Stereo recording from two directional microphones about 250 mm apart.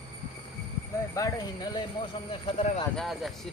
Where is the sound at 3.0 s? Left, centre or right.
Centre.